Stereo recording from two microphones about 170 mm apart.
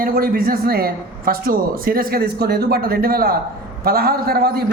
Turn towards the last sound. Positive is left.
turn(degrees=-65)  # may be behind; listen again after turning